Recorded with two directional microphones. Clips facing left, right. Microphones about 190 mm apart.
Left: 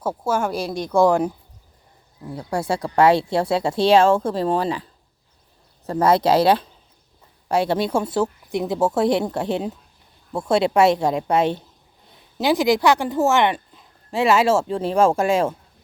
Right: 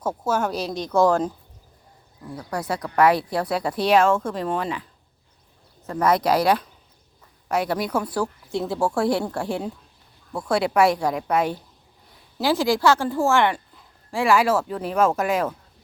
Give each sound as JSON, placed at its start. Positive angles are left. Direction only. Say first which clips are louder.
{"t": 0.0, "sound": "speech", "louder": "left 1 dB", "side_deg": 10}
{"t": 2.3, "sound": "a woman's voice", "louder": "left 4 dB", "side_deg": 25}